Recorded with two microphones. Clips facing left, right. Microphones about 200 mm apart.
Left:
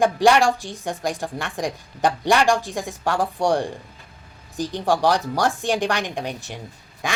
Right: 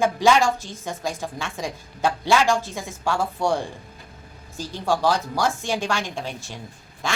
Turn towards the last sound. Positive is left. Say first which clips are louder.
# left 1 dB
turn(degrees=15)  # may be behind; listen again after turning